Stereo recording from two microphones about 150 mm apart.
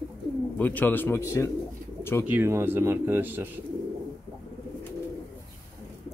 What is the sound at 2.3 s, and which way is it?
Speech, 15° right (ahead or behind).